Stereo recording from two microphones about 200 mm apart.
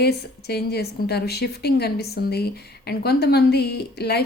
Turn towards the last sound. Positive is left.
turn(degrees=55)  # may be behind; listen again after turning